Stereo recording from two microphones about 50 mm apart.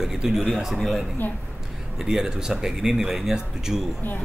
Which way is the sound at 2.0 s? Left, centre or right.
Centre.